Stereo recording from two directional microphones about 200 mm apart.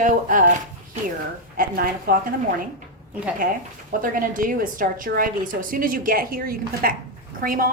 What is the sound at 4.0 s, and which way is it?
A woman's voice, 45° right (ahead or behind).